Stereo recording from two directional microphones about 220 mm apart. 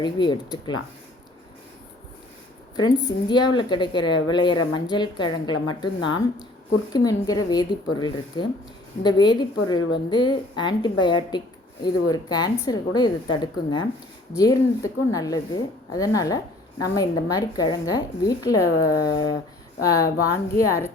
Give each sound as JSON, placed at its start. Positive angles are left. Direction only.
{"t": 0.0, "sound": "a woman's voice", "side_deg": 20}
{"t": 2.7, "sound": "a woman's voice", "side_deg": 20}
{"t": 6.9, "sound": "a woman's voice", "side_deg": 15}